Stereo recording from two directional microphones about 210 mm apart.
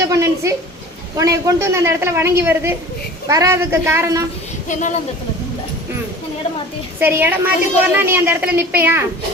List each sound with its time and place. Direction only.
0.0 s a sound: 15° right (ahead or behind)
1.1 s a man's voice: 15° right (ahead or behind)
4.7 s a woman's voice: 35° left (ahead or behind)
7.0 s a man's voice: 10° right (ahead or behind)